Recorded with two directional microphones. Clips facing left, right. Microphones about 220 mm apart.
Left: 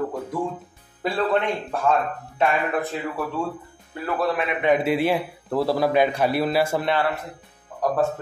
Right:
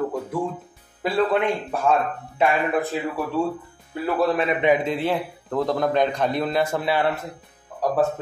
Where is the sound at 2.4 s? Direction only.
5° right (ahead or behind).